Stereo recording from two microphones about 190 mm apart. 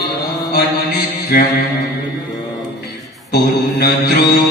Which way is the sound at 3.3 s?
55° left (ahead or behind).